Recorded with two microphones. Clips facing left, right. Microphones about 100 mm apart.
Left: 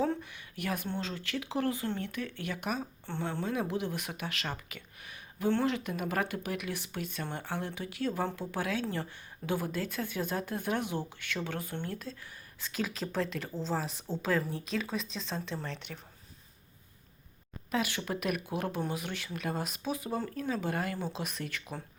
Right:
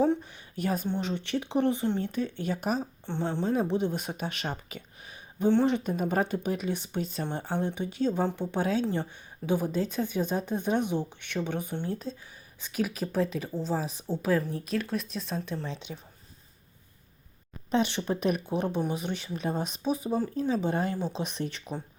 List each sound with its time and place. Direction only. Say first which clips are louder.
0.0 s speech: right 6 dB; 20° right (ahead or behind)
0.9 s a woman's voice: right 6 dB; 20° right (ahead or behind)
15.9 s a woman's voice: right 4 dB; 20° right (ahead or behind)
17.7 s a woman's voice: right 6 dB; 30° right (ahead or behind)